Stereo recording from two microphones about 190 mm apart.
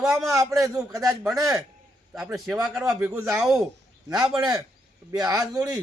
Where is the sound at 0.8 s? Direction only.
15° right (ahead or behind).